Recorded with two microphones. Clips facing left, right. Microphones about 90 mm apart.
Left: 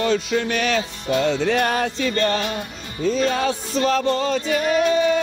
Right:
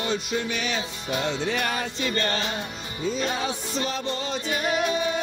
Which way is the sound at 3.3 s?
80° left.